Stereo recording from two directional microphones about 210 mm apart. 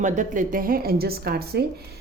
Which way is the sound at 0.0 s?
35° right (ahead or behind).